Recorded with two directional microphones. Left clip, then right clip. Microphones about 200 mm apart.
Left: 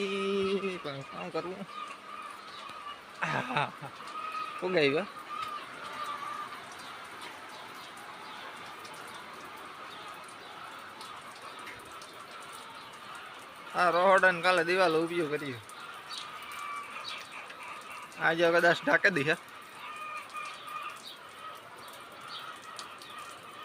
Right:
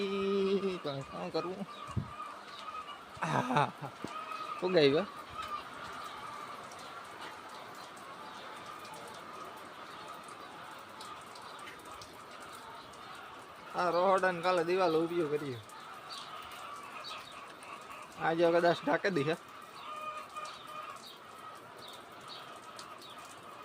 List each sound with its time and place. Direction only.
0.0 s a sound: 10° right (ahead or behind)
3.2 s speech: 25° right (ahead or behind)
4.6 s speech: 20° right (ahead or behind)
13.7 s speech: centre (ahead or behind)
18.2 s speech: 10° right (ahead or behind)